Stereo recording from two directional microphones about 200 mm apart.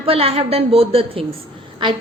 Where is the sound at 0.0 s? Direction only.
30° right (ahead or behind).